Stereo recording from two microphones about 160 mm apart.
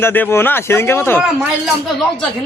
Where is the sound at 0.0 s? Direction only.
15° left (ahead or behind).